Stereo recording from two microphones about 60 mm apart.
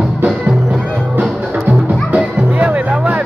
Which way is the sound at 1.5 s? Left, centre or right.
Right.